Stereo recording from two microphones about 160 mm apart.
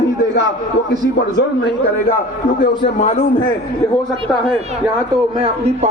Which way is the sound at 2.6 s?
50° left (ahead or behind).